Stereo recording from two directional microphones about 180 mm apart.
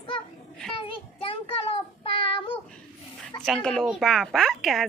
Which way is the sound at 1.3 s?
30° left (ahead or behind).